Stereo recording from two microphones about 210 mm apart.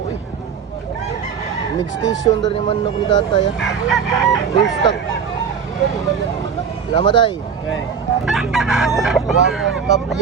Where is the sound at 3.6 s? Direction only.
Centre (ahead or behind).